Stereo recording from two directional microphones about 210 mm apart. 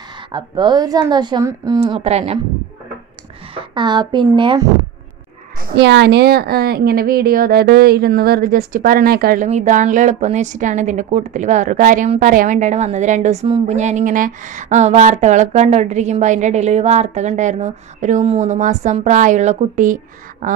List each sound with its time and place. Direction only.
0.3 s a woman's voice: 20° right (ahead or behind)
3.5 s a woman's voice: 20° right (ahead or behind)
5.8 s a woman's voice: 55° right (ahead or behind); by 20.6 s 40° right (ahead or behind)